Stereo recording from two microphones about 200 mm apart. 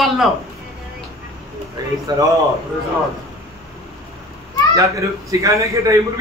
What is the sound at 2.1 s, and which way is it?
Speech, 20° right (ahead or behind).